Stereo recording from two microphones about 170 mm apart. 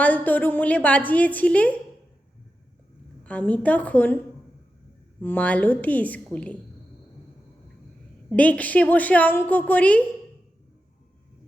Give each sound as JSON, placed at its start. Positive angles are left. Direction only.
{"t": 0.0, "sound": "a woman's voice", "side_deg": 10}
{"t": 3.2, "sound": "a woman's voice", "side_deg": 5}
{"t": 5.2, "sound": "a woman's voice", "side_deg": 10}
{"t": 8.3, "sound": "a woman's voice", "side_deg": 10}